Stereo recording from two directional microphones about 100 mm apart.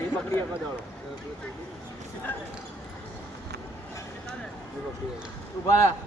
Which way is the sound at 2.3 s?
20° left (ahead or behind).